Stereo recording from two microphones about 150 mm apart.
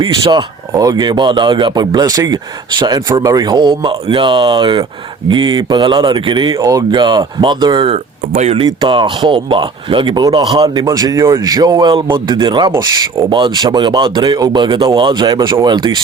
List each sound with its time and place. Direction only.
0.0 s speech: 30° right (ahead or behind)
7.9 s speech: 45° right (ahead or behind)
8.6 s speech: 30° right (ahead or behind)
10.8 s speech: 25° right (ahead or behind)